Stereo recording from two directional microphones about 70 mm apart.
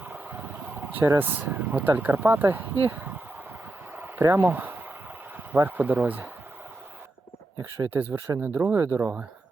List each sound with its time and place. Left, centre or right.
0.0 s vehicle: right
1.2 s speech: right
3.9 s a sound: right
4.2 s speech: right
4.4 s speech: right
7.9 s speech: right